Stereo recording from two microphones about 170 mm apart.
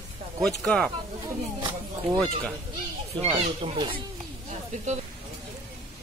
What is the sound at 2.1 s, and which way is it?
Speech, 5° left (ahead or behind).